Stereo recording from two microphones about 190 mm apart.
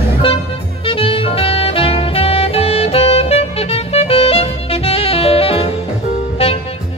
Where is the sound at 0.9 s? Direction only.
30° left (ahead or behind).